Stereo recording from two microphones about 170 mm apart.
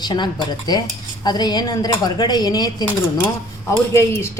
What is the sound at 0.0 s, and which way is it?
A woman's voice, 25° left (ahead or behind).